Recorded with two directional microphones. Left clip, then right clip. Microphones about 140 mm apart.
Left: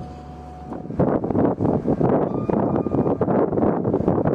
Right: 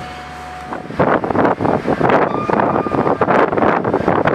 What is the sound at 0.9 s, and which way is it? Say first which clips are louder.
Wind noise: right 7 dB; 25° left (ahead or behind).